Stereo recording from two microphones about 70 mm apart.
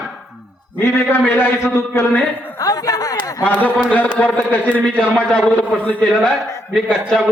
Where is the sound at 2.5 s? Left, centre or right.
Left.